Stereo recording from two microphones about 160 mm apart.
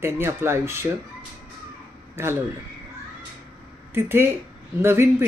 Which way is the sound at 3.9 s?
15° right (ahead or behind).